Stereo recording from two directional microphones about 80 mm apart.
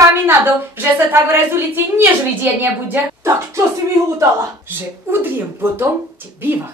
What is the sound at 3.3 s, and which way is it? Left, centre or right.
Speech, right.